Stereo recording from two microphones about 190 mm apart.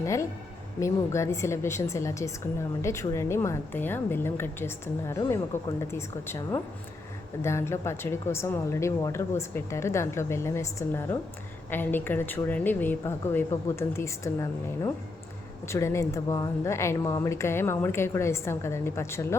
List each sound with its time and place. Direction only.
0.0 s speech: 15° left (ahead or behind)